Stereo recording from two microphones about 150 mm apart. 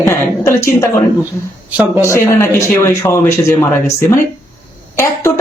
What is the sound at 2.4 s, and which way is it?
Speech, 20° left (ahead or behind).